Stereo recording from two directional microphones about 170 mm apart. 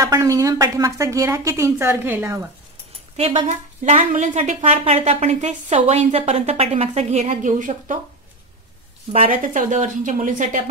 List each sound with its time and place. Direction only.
0.0 s a woman's voice: 20° right (ahead or behind)
3.2 s a woman's voice: 40° right (ahead or behind)
9.1 s a woman's voice: 45° right (ahead or behind)